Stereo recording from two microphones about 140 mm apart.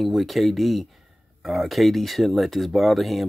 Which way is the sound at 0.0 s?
Centre (ahead or behind).